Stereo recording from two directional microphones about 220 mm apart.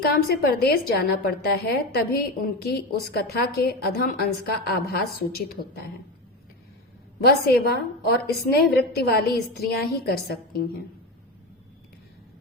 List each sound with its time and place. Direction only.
0.0 s a woman's voice: 45° left (ahead or behind)
7.3 s a woman's voice: 45° left (ahead or behind)